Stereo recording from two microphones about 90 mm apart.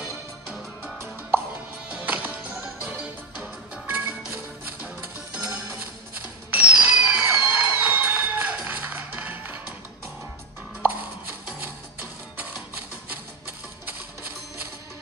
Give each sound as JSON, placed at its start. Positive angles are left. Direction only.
{"t": 0.0, "sound": "music", "side_deg": -5}
{"t": 6.5, "sound": "a sound", "side_deg": -15}
{"t": 10.8, "sound": "music", "side_deg": -20}